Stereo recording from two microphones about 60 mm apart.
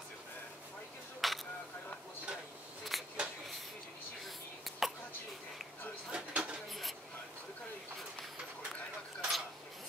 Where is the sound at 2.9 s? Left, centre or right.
Centre.